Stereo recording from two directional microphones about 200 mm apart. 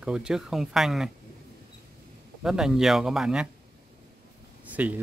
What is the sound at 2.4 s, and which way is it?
Speech, centre (ahead or behind).